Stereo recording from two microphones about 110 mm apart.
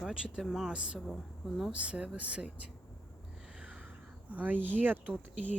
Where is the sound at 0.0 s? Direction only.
5° right (ahead or behind).